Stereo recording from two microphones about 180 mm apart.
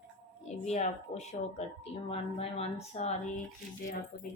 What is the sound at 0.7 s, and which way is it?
Speech, 40° left (ahead or behind).